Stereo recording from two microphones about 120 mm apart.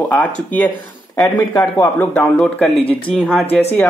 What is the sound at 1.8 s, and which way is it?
Speech, 20° left (ahead or behind).